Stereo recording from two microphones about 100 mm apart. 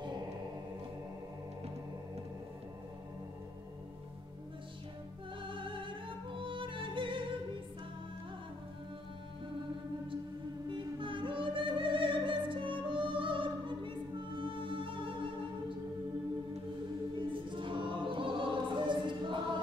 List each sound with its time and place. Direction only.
5.4 s music: 55° right (ahead or behind)
10.7 s music: 55° right (ahead or behind)
17.3 s choir: 55° right (ahead or behind)